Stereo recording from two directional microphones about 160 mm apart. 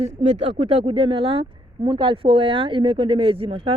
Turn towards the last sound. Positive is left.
turn(degrees=-35)  # may be behind; listen again after turning